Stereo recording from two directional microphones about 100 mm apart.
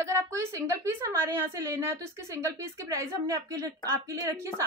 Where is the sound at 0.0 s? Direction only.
30° right (ahead or behind).